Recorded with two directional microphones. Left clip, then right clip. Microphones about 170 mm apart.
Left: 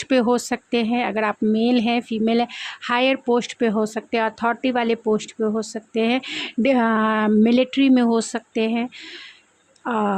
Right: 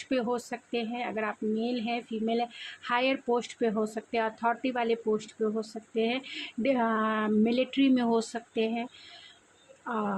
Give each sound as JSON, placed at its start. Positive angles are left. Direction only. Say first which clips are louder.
{"t": 0.0, "sound": "speech", "louder": "left 11 dB", "side_deg": 50}